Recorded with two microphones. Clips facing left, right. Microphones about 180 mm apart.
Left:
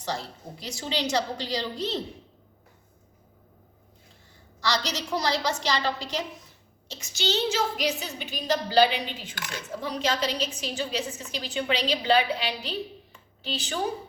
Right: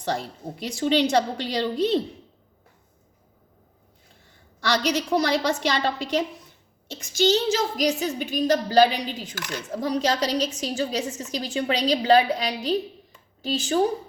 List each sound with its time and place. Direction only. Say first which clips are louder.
0.6 s a woman's voice: right 9 dB; 60° right (ahead or behind)
4.6 s a woman's voice: right 5 dB; 60° right (ahead or behind)
7.0 s a woman's voice: right 7 dB; 50° right (ahead or behind)